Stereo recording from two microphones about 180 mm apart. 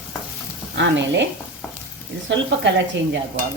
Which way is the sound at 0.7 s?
80° right.